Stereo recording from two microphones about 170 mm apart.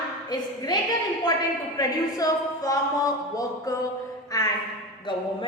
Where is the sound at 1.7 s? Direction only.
20° left (ahead or behind).